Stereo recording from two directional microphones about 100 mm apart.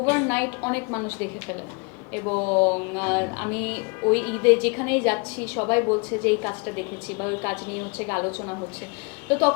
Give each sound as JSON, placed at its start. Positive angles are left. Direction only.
{"t": 0.0, "sound": "music", "side_deg": 15}